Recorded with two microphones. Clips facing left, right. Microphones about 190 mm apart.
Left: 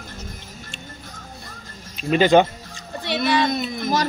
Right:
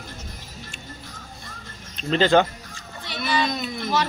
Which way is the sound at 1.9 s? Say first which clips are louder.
Left 3 dB; 15° left (ahead or behind).